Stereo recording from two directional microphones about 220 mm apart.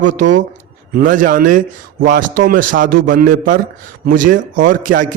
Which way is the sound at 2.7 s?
40° right (ahead or behind).